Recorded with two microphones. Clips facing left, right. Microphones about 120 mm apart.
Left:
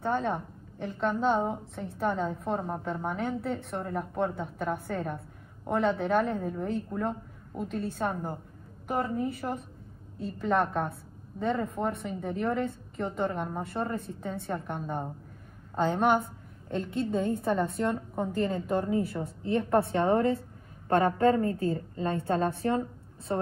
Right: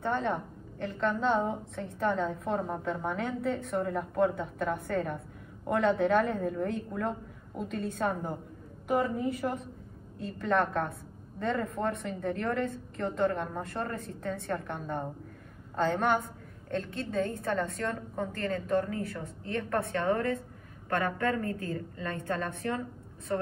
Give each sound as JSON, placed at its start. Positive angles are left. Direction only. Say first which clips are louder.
{"t": 0.0, "sound": "a woman's voice", "louder": "left 1 dB", "side_deg": 5}